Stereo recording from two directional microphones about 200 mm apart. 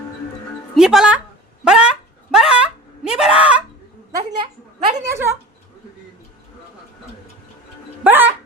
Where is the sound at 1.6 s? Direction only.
5° right (ahead or behind).